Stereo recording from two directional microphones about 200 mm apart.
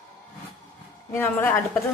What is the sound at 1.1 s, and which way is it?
Speech, 10° left (ahead or behind).